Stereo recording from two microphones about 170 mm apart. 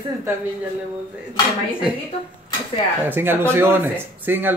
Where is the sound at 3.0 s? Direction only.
10° right (ahead or behind).